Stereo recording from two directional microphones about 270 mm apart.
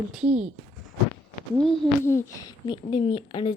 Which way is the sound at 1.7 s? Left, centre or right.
Centre.